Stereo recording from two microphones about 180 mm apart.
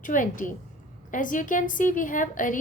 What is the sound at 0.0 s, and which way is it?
A woman's voice, 45° left (ahead or behind).